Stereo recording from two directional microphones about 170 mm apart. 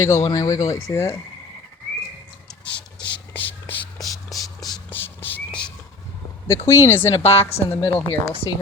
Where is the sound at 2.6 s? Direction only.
30° left (ahead or behind).